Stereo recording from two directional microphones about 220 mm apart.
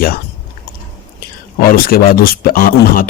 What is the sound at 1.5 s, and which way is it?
Speech, 40° left (ahead or behind).